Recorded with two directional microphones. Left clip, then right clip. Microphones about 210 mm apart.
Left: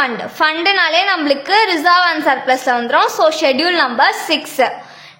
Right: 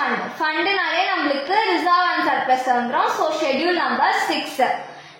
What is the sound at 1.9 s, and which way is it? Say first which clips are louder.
Speech: left 7 dB; 35° left (ahead or behind).